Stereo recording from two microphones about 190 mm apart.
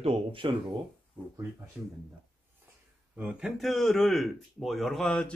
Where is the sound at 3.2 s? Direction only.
5° right (ahead or behind).